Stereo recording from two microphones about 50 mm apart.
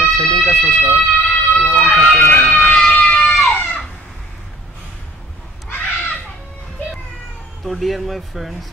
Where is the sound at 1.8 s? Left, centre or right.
Left.